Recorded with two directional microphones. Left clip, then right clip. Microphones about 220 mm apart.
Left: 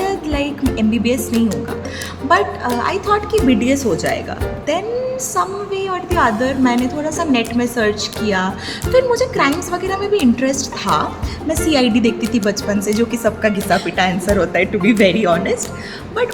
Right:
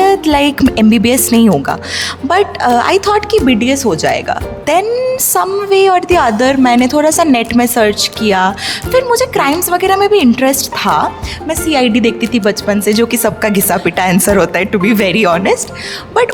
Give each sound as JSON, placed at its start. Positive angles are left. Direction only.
{"t": 0.0, "sound": "a woman's voice", "side_deg": -50}
{"t": 3.4, "sound": "a woman's voice", "side_deg": -40}